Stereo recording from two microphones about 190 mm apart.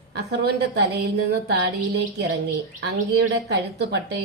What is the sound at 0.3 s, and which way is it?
Speech, 60° right (ahead or behind).